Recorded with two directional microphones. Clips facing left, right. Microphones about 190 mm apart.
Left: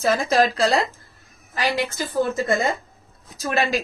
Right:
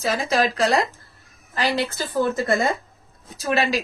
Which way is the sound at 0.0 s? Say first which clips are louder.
Left 3 dB; 45° left (ahead or behind).